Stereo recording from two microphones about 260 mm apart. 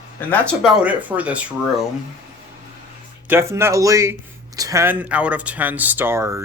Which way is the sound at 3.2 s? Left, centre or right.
Centre.